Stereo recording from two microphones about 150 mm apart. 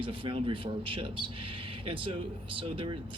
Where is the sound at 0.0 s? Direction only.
35° right (ahead or behind).